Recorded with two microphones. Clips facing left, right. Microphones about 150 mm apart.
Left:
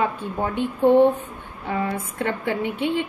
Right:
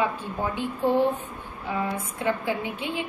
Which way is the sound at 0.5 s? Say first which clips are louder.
Left 8 dB; 60° left (ahead or behind).